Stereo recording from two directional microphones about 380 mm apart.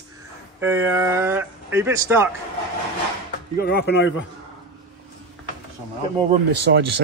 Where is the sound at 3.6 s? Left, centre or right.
Left.